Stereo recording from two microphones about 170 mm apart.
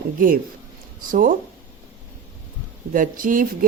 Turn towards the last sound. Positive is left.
turn(degrees=-55)  # may be behind; listen again after turning